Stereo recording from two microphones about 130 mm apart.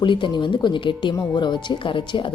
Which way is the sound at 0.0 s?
40° left (ahead or behind).